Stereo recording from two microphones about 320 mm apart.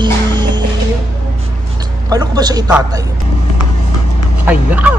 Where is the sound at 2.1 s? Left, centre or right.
Centre.